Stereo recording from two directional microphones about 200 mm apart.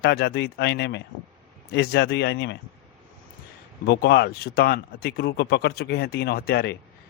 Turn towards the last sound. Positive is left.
turn(degrees=50)  # may be behind; listen again after turning